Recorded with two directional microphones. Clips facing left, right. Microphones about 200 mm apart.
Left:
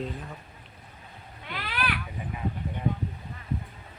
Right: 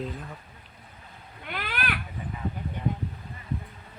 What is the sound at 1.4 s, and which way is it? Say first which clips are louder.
Cat: even; 50° right (ahead or behind).